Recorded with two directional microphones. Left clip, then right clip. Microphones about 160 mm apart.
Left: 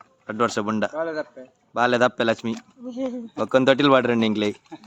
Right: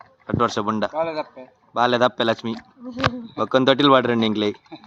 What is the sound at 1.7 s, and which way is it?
Speech, 15° left (ahead or behind).